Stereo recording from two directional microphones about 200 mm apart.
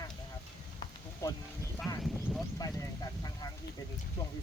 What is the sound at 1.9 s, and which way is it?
Speech, 15° left (ahead or behind).